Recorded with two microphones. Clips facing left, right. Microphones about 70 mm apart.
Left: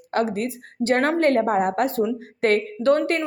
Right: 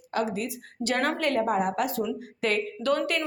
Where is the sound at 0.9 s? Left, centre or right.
Left.